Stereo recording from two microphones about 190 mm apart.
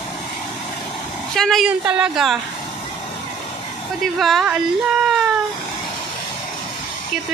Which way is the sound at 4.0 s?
Centre (ahead or behind).